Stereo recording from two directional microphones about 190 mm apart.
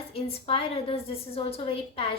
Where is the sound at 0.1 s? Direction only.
30° left (ahead or behind).